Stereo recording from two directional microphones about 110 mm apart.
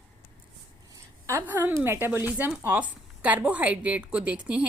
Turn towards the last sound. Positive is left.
turn(degrees=-10)  # may be behind; listen again after turning